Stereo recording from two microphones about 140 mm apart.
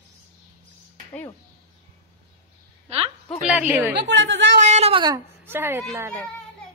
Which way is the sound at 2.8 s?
45° right (ahead or behind).